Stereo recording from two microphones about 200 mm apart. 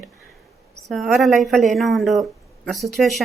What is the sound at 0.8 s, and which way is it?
Speech, centre (ahead or behind).